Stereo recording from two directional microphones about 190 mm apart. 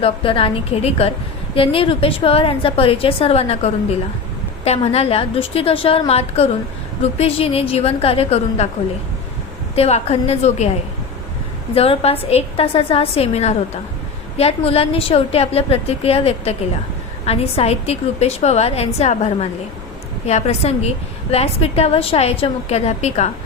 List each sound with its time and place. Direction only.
0.0 s a woman's voice: 30° left (ahead or behind)
9.7 s a woman's voice: 35° left (ahead or behind)
11.7 s a woman's voice: 30° left (ahead or behind)